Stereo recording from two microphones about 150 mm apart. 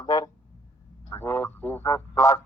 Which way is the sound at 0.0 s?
25° left (ahead or behind).